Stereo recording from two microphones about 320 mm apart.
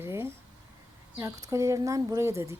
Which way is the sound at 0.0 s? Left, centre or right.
Centre.